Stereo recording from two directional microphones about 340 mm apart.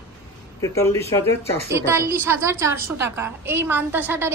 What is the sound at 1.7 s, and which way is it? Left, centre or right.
A woman's voice, centre.